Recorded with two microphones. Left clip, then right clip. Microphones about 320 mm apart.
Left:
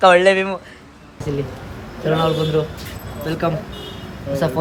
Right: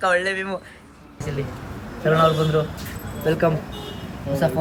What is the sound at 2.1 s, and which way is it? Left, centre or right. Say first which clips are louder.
Speech: even; centre.